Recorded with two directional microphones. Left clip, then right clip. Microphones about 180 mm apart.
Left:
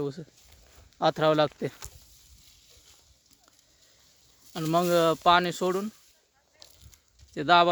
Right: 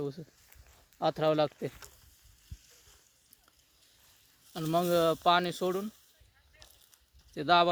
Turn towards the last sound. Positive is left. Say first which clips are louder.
# left 4 dB
turn(degrees=5)  # may be behind; listen again after turning